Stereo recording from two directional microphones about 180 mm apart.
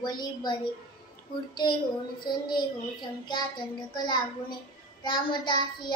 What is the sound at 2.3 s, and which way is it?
Speech, 25° left (ahead or behind).